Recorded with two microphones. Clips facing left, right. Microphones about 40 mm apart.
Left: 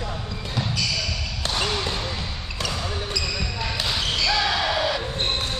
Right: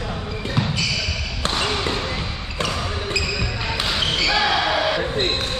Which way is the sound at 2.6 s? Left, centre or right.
Right.